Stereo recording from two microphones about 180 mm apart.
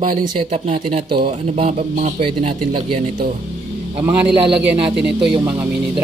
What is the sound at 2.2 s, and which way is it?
Speech, 30° right (ahead or behind).